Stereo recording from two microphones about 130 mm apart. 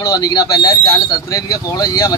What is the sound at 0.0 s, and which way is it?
Speech, 30° left (ahead or behind).